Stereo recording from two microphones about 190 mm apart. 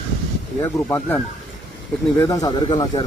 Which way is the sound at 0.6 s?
10° left (ahead or behind).